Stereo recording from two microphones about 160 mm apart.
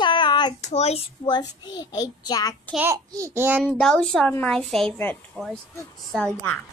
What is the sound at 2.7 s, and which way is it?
Speech, 15° right (ahead or behind).